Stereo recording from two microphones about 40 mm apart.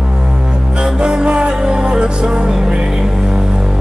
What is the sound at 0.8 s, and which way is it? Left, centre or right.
Music, centre.